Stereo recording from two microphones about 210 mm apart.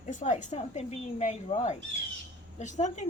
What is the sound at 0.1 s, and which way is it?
Speech, 35° left (ahead or behind).